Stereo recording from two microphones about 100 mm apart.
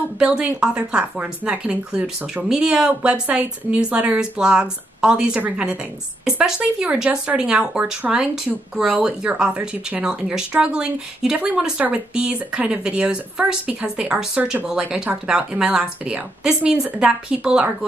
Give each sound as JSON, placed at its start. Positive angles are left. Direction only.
{"t": 0.2, "sound": "speech", "side_deg": -10}